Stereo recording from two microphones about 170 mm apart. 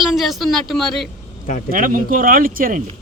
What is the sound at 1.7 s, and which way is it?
Speech, 55° right (ahead or behind).